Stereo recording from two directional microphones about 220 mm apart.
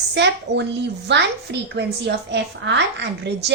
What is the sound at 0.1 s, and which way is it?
A woman's voice, 50° right (ahead or behind).